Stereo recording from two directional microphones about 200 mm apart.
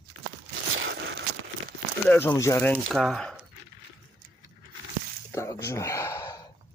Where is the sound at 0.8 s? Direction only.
65° right (ahead or behind).